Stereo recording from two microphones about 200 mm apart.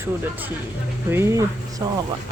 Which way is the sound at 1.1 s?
15° right (ahead or behind).